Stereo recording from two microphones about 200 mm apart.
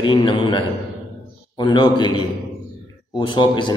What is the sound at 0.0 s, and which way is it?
A man's voice, 25° left (ahead or behind).